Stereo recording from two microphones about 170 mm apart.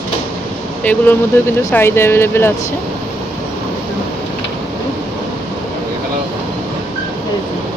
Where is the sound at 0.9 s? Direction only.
10° left (ahead or behind).